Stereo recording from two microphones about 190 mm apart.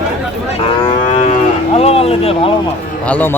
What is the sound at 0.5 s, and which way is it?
Cattle, 35° left (ahead or behind).